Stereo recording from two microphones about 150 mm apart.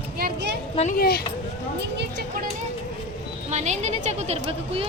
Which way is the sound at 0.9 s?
90° left.